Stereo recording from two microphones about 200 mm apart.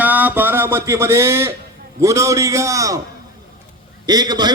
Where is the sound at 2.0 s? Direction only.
15° right (ahead or behind).